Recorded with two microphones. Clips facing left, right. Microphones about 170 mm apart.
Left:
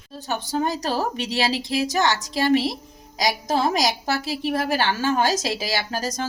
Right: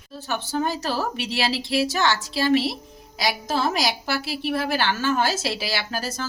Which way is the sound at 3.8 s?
40° left (ahead or behind).